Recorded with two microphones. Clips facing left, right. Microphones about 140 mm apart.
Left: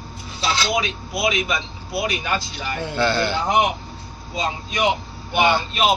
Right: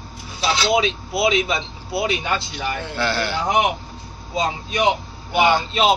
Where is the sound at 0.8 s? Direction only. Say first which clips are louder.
Right 3 dB; 25° right (ahead or behind).